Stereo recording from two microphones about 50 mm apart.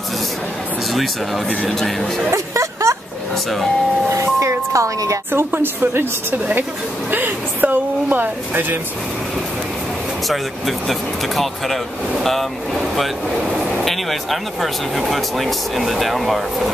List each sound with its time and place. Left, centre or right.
1.8 s speech: centre
2.3 s a sound: right
4.1 s speech: right
5.3 s a woman's voice: right
10.9 s speech: centre